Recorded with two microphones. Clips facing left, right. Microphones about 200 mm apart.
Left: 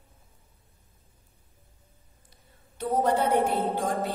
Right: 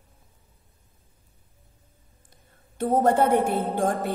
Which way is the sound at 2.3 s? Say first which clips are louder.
Right 1 dB; 50° right (ahead or behind).